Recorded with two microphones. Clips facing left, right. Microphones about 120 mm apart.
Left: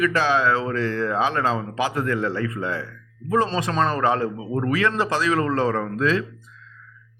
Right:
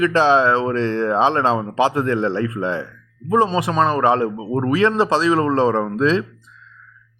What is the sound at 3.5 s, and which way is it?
A man's voice, 15° right (ahead or behind).